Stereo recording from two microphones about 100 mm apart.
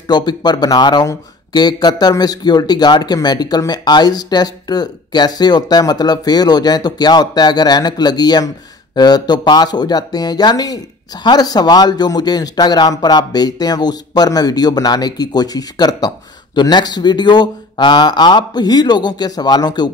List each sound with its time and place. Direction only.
0.1 s speech: 45° left (ahead or behind)